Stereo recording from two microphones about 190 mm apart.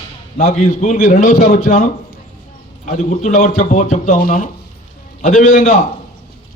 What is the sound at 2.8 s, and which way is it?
A man's voice, 40° left (ahead or behind).